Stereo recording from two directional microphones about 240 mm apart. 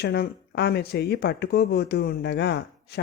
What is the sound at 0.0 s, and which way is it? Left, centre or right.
Speech, left.